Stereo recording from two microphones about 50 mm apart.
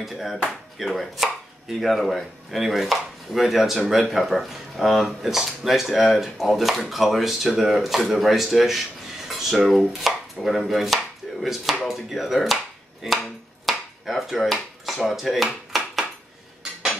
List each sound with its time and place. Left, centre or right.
0.0 s speech: centre
0.7 s chopping: centre
4.1 s speech: centre
9.3 s chopping: centre
11.4 s speech: centre
13.0 s chopping: centre